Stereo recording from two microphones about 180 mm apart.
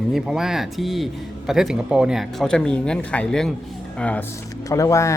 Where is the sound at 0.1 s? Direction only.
Centre (ahead or behind).